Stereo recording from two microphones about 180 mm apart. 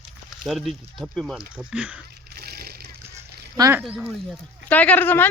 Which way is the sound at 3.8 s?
Centre (ahead or behind).